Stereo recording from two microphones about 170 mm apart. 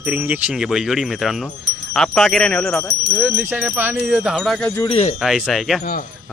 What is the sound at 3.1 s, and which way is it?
Jingle bell, 10° right (ahead or behind).